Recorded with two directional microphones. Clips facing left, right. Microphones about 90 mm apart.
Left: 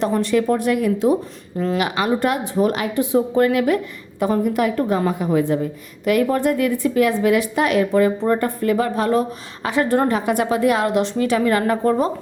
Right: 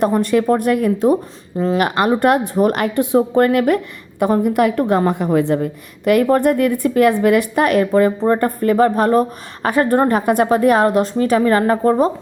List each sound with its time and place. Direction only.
0.0 s a woman's voice: 50° right (ahead or behind)
1.5 s a woman's voice: 30° right (ahead or behind)
1.8 s a woman's voice: 50° right (ahead or behind)